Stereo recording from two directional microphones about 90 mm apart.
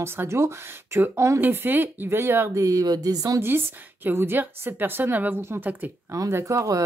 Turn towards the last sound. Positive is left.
turn(degrees=-40)  # may be behind; listen again after turning